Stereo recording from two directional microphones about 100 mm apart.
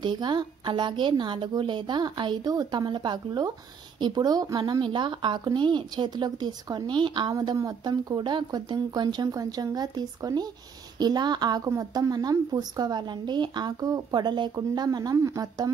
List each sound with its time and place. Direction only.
0.0 s a woman's voice: 45° right (ahead or behind)
7.3 s speech: 40° right (ahead or behind)
8.2 s a woman's voice: 50° right (ahead or behind)